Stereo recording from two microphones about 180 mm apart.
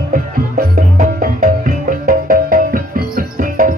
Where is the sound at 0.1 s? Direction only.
45° right (ahead or behind).